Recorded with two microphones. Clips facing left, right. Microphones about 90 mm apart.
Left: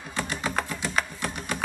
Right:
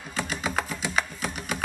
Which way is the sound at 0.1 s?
Centre (ahead or behind).